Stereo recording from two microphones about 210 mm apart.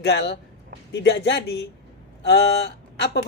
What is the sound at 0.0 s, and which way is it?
Speech, 55° left (ahead or behind).